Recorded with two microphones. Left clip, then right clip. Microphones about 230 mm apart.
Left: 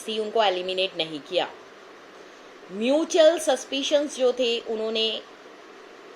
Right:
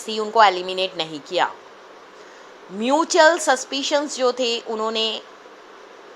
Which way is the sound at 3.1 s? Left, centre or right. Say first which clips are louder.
Right 3 dB; centre.